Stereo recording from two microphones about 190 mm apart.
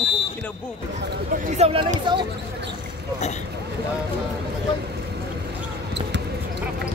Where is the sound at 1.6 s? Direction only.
30° right (ahead or behind).